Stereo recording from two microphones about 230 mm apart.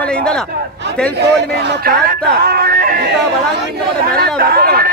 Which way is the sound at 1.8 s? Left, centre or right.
Right.